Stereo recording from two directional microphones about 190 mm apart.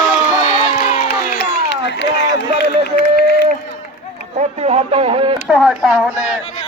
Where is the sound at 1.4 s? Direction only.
65° left (ahead or behind).